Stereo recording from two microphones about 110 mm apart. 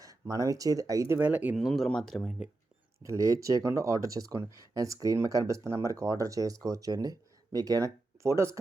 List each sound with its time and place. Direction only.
0.0 s speech: 35° right (ahead or behind); by 1.5 s 15° right (ahead or behind)
1.5 s speech: centre (ahead or behind)
3.0 s speech: 30° right (ahead or behind)